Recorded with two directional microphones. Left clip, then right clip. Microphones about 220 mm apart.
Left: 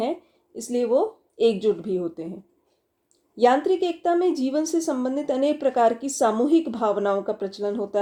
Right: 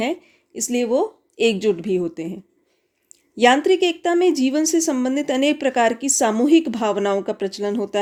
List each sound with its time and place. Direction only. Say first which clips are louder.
0.0 s a woman's voice: right 3 dB; 30° right (ahead or behind)